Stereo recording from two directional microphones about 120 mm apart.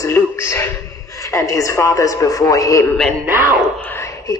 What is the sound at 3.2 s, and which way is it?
Speech, 15° right (ahead or behind).